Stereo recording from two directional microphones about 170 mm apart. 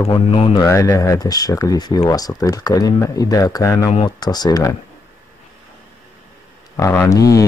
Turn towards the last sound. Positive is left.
turn(degrees=20)  # may be behind; listen again after turning